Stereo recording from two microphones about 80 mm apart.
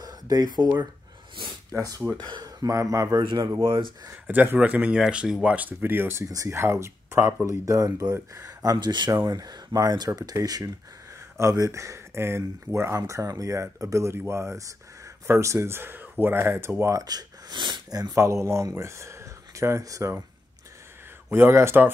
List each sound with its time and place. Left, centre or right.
0.0 s a sound: right
1.3 s a sound: right
1.7 s speech: right
2.1 s speech: right
3.2 s speech: right
4.3 s speech: right
6.2 s speech: right
6.5 s speech: right
8.7 s speech: right
9.2 s speech: right
17.0 s speech: right
21.3 s speech: right